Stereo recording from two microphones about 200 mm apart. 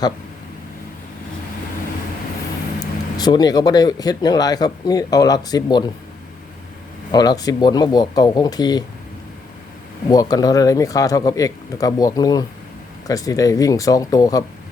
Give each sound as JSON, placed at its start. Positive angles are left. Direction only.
{"t": 3.2, "sound": "speech", "side_deg": 20}
{"t": 7.1, "sound": "speech", "side_deg": 20}
{"t": 10.1, "sound": "speech", "side_deg": 20}